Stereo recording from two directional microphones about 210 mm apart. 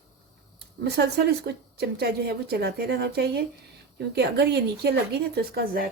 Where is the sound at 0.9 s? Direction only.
50° right (ahead or behind).